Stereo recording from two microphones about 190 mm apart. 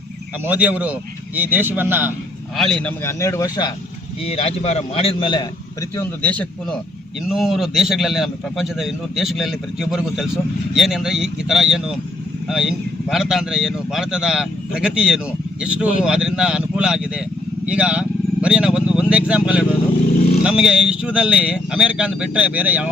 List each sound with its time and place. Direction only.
0.4 s a man's voice: 10° right (ahead or behind)
2.6 s a man's voice: 5° left (ahead or behind); by 3.7 s 20° left (ahead or behind)
4.3 s a man's voice: 35° left (ahead or behind)
6.0 s a man's voice: 10° left (ahead or behind); by 22.9 s 10° right (ahead or behind)